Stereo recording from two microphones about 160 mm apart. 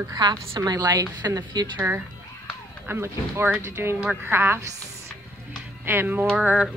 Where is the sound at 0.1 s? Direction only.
20° right (ahead or behind).